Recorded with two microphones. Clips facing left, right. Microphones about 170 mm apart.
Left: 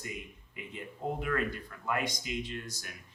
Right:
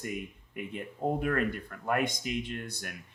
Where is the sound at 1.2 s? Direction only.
50° right (ahead or behind).